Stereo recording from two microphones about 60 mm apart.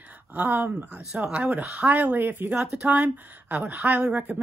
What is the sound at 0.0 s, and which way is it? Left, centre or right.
A woman's voice, right.